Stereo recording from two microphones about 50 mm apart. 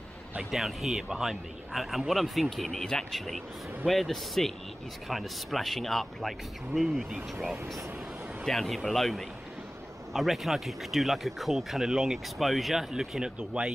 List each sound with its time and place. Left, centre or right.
0.4 s speech: centre
13.2 s speech: centre